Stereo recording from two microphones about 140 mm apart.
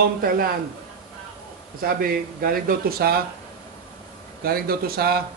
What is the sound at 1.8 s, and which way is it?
Speech, 90° right.